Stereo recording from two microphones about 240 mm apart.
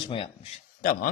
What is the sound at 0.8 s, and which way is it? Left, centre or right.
Speech, left.